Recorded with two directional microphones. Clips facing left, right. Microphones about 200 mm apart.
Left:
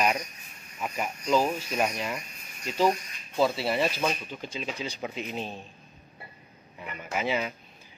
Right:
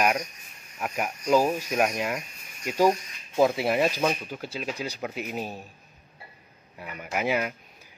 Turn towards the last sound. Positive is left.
turn(degrees=-10)  # may be behind; listen again after turning